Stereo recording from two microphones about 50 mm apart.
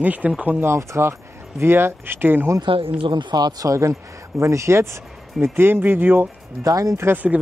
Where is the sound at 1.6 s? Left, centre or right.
Right.